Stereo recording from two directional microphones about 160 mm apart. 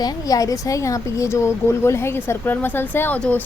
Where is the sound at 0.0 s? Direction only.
25° left (ahead or behind).